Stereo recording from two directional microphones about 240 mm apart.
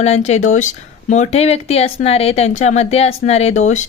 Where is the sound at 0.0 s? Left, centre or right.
Left.